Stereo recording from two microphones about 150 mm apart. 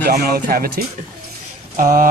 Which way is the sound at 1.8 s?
65° right (ahead or behind).